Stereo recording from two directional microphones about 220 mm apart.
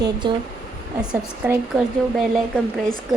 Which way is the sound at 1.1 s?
5° right (ahead or behind).